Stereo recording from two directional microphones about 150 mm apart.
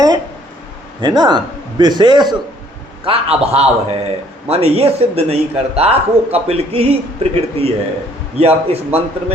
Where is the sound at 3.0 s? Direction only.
40° right (ahead or behind).